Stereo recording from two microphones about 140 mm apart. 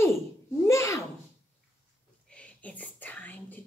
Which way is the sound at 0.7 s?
20° left (ahead or behind).